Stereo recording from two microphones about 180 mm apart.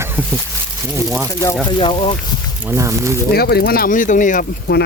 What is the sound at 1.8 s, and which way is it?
Speech, 30° left (ahead or behind).